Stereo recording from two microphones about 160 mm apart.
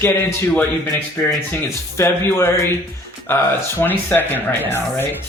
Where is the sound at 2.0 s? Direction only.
15° left (ahead or behind).